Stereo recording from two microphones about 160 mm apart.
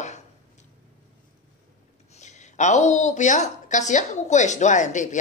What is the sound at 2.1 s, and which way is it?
A woman's voice, 45° left (ahead or behind).